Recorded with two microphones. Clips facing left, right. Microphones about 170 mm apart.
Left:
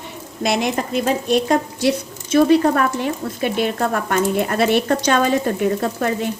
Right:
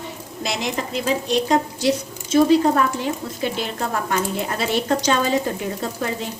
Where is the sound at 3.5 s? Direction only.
55° left (ahead or behind).